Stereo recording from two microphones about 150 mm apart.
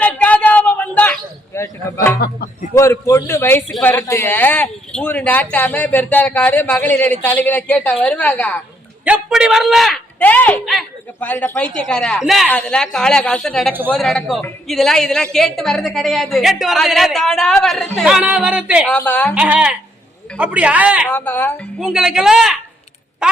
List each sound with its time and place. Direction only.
0.0 s a sound: 10° left (ahead or behind)
2.7 s a man's voice: 20° left (ahead or behind)
9.0 s a woman's voice: 5° right (ahead or behind)
10.2 s a man's voice: 10° left (ahead or behind)
12.5 s a woman's voice: 10° left (ahead or behind); by 18.8 s 5° right (ahead or behind)
18.9 s a man's voice: 10° left (ahead or behind)
19.3 s speech: 10° right (ahead or behind)
21.1 s a man's voice: 10° left (ahead or behind)
21.8 s a woman's voice: 5° right (ahead or behind)